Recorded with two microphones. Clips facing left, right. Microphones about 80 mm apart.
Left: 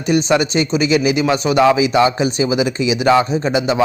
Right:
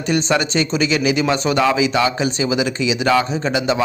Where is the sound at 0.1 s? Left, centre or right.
Centre.